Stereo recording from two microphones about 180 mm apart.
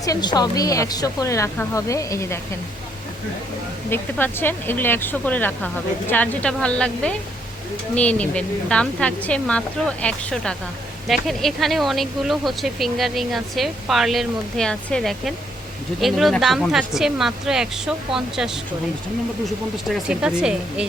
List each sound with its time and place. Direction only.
0.0 s speech: 20° left (ahead or behind)
3.8 s speech: 10° left (ahead or behind); by 20.8 s 5° right (ahead or behind)